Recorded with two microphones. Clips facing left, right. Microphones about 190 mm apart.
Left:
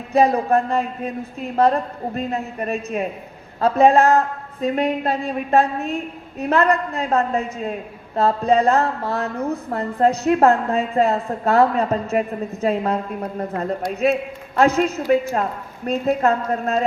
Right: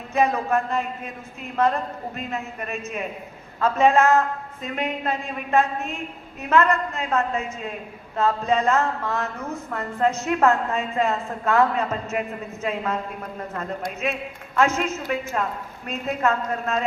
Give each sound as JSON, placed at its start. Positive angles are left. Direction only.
{"t": 0.1, "sound": "speech", "side_deg": 35}